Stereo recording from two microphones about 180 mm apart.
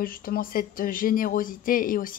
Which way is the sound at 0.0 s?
50° left (ahead or behind).